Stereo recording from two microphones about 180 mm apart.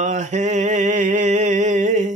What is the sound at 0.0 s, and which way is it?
Mantra, 40° right (ahead or behind).